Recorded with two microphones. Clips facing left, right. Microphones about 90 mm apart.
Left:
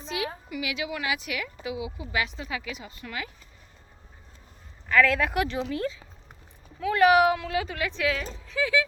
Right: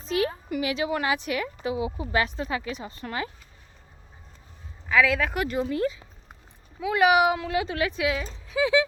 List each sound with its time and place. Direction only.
0.0 s a woman's voice: 45° right (ahead or behind)
4.9 s speech: 5° right (ahead or behind); by 8.9 s 20° right (ahead or behind)